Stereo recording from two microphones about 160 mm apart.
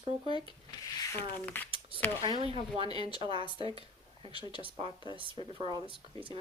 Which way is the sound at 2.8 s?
30° left (ahead or behind).